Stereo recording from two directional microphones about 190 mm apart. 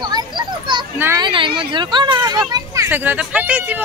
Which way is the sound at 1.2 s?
25° right (ahead or behind).